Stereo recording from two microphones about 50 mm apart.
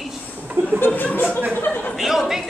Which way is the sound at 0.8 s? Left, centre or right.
Left.